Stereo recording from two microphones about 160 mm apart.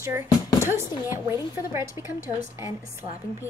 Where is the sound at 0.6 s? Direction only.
15° right (ahead or behind).